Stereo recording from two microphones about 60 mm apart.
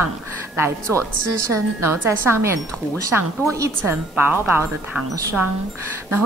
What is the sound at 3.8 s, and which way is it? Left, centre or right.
Speech, right.